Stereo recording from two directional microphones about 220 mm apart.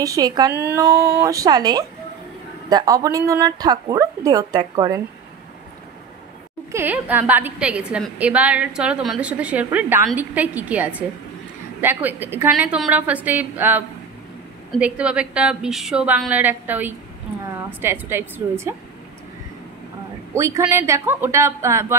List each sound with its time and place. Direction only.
0.0 s a woman's voice: 15° right (ahead or behind)
0.8 s a sound: 45° right (ahead or behind)
1.1 s a woman's voice: 15° right (ahead or behind)
6.7 s a woman's voice: 10° right (ahead or behind)
20.3 s a woman's voice: 15° right (ahead or behind)